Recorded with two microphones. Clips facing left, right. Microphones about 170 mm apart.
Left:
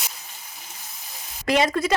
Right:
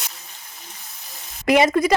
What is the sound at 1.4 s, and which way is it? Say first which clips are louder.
Speech: right 5 dB; 10° right (ahead or behind).